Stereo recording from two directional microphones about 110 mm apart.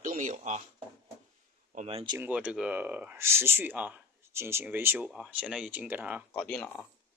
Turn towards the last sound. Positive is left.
turn(degrees=5)  # may be behind; listen again after turning